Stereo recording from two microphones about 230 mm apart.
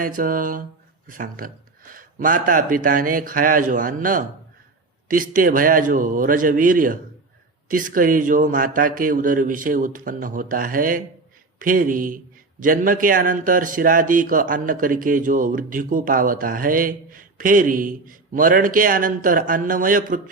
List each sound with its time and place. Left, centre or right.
0.0 s a man's voice: right